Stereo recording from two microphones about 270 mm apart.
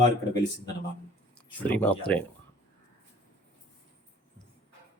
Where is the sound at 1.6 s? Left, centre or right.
Centre.